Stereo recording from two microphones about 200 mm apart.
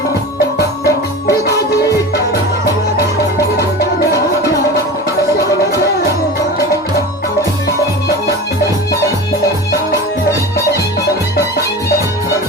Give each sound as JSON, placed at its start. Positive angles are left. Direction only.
{"t": 0.9, "sound": "music", "side_deg": 15}